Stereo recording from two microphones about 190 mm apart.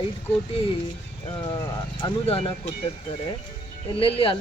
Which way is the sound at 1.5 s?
20° left (ahead or behind).